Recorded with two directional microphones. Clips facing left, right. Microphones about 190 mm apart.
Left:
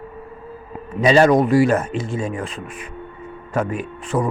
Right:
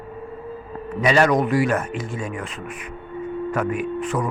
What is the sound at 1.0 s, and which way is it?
Speech, 30° left (ahead or behind).